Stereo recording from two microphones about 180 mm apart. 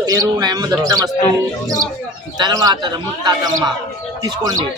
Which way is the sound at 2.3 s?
20° right (ahead or behind).